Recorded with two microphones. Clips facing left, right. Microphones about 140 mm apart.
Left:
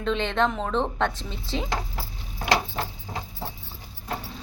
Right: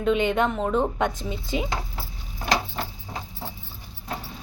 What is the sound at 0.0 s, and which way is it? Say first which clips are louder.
A woman's voice: right 3 dB; 10° right (ahead or behind).